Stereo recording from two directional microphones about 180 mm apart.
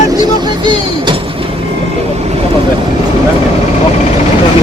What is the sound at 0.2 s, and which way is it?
Speech, 25° right (ahead or behind).